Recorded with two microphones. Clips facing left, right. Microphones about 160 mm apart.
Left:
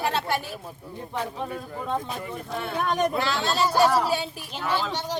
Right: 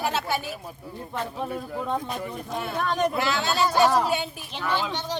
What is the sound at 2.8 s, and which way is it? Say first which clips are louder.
Speech: left 1 dB; 20° left (ahead or behind).